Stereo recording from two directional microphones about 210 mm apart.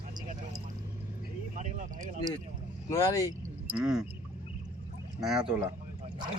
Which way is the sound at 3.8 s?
Centre (ahead or behind).